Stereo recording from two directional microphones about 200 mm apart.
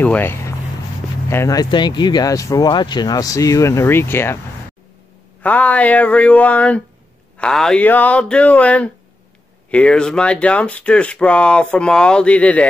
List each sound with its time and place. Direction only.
0.0 s speech: 10° left (ahead or behind)
5.4 s speech: 5° left (ahead or behind)